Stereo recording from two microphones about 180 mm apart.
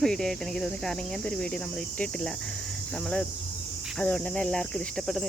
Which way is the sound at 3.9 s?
5° left (ahead or behind).